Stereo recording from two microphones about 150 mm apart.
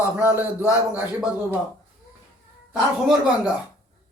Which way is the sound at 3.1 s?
5° right (ahead or behind).